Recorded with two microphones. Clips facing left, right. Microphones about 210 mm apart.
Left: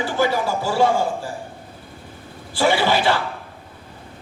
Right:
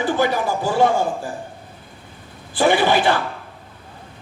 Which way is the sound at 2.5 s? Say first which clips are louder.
Right 2 dB; 20° right (ahead or behind).